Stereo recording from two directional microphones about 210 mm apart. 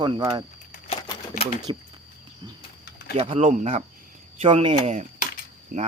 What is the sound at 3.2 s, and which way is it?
Speech, 30° right (ahead or behind).